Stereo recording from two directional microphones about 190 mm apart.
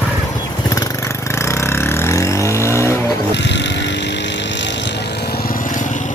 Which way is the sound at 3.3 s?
65° left (ahead or behind).